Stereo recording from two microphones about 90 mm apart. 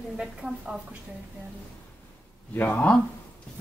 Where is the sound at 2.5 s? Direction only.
15° left (ahead or behind).